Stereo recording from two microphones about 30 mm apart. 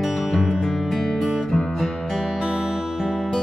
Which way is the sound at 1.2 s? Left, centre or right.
Centre.